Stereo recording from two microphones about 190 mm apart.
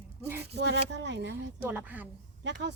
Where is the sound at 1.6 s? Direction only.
10° right (ahead or behind).